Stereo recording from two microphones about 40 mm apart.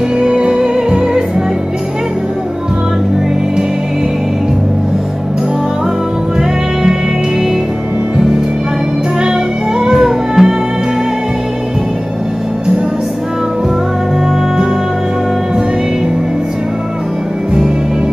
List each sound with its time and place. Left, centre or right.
0.2 s music: right
9.2 s music: centre